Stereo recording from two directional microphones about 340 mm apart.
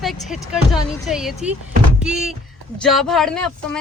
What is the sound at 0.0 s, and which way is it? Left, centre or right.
Speech, centre.